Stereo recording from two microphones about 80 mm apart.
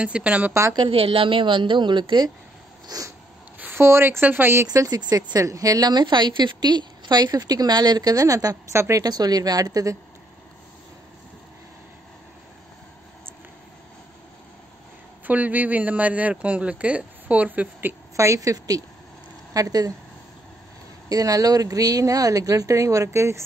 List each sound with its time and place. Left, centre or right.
0.0 s a woman's voice: centre
0.5 s speech: right
0.7 s a woman's voice: right
2.9 s speech: right
3.5 s speech: right
4.7 s a woman's voice: right
8.7 s speech: right
9.0 s speech: right
15.2 s speech: right
18.1 s speech: right
21.1 s speech: right